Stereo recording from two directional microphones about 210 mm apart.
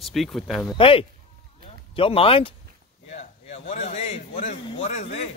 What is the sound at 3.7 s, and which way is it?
A man's voice, 35° left (ahead or behind).